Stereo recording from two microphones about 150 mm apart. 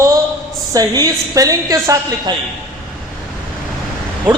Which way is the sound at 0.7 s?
25° right (ahead or behind).